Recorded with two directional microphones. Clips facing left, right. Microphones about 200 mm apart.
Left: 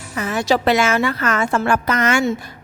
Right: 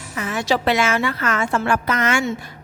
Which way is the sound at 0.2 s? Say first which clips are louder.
Left 3 dB; 40° left (ahead or behind).